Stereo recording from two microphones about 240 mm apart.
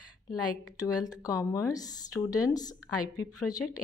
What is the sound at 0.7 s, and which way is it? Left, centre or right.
Speech, centre.